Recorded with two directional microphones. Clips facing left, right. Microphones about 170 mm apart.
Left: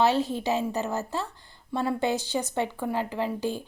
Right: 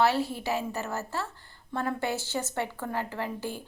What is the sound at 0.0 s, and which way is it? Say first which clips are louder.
A woman's voice: left 2 dB; 20° left (ahead or behind).